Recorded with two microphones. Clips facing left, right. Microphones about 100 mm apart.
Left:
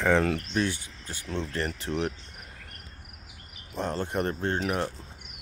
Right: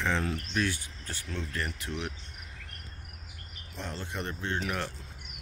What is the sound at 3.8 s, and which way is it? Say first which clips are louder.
Speech: left 9 dB; 45° left (ahead or behind).